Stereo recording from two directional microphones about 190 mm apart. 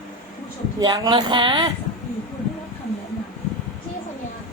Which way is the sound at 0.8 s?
20° right (ahead or behind).